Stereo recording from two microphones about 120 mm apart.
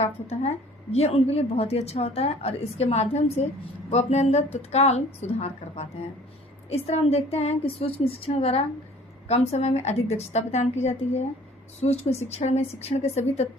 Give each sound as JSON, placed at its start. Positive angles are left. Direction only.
{"t": 0.0, "sound": "a woman's voice", "side_deg": 60}